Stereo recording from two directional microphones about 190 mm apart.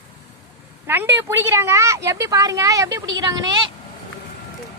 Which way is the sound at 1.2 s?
15° right (ahead or behind).